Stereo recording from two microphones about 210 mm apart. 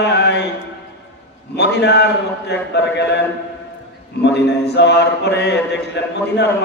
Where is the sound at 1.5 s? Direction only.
55° left (ahead or behind).